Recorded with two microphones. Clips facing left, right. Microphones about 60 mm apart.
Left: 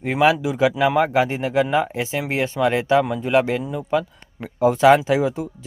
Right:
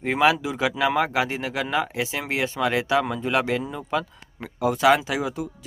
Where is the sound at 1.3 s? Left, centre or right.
Centre.